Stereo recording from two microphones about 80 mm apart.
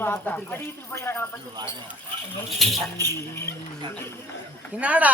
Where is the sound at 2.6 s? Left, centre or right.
Centre.